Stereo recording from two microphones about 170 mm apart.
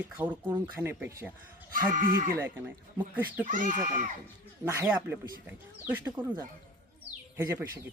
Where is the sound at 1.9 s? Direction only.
55° right (ahead or behind).